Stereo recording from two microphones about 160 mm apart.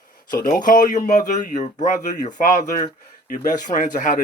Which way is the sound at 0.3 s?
65° left (ahead or behind).